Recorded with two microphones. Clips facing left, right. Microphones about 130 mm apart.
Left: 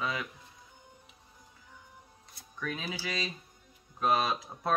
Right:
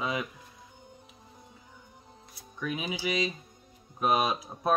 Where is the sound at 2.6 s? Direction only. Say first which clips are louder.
Right 4 dB; 15° right (ahead or behind).